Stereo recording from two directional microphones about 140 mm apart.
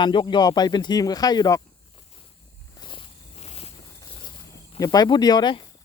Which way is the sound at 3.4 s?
45° left (ahead or behind).